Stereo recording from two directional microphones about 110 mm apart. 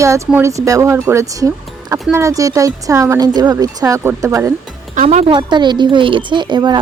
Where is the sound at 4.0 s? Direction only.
25° right (ahead or behind).